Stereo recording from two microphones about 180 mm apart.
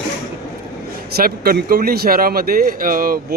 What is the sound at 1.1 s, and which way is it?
Speech, 55° right (ahead or behind).